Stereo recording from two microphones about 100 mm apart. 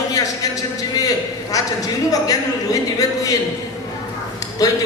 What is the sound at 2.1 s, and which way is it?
Speech, 35° left (ahead or behind).